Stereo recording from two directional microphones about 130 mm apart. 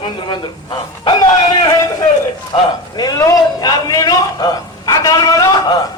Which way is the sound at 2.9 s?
30° left (ahead or behind).